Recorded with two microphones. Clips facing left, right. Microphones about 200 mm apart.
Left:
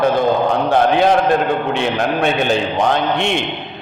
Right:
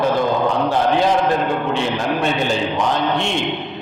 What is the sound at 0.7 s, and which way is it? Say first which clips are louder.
A man's voice: left 5 dB; 60° left (ahead or behind).